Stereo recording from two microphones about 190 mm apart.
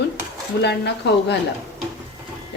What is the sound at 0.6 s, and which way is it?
Speech, 60° left (ahead or behind).